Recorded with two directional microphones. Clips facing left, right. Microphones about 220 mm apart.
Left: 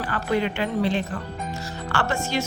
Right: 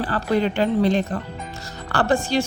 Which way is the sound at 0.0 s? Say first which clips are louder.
Right 3 dB; 35° right (ahead or behind).